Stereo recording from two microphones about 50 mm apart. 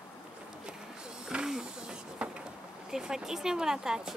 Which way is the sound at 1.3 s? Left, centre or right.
Centre.